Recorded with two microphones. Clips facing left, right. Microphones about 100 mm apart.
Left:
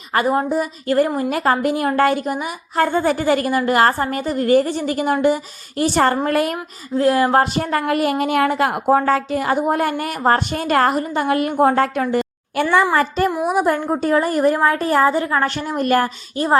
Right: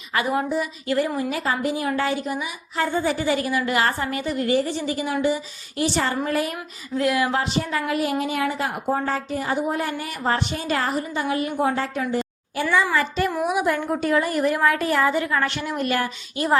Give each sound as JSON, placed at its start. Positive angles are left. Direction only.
{"t": 0.1, "sound": "a woman's voice", "side_deg": 40}
{"t": 6.6, "sound": "a woman's voice", "side_deg": 35}